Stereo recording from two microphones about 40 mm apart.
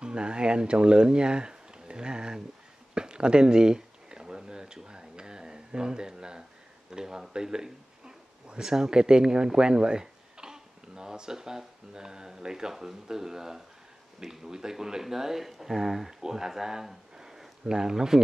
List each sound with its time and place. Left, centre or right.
0.0 s speech: right
2.9 s a sound: right
6.9 s a man's voice: centre